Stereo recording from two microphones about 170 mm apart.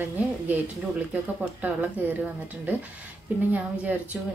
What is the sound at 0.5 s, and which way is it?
A woman's voice, 10° right (ahead or behind).